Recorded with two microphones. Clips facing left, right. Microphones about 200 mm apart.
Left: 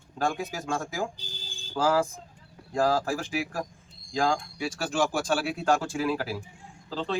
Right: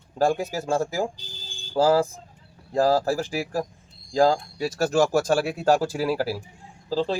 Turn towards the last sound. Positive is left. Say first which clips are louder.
# right 7 dB
turn(degrees=-35)  # may be behind; listen again after turning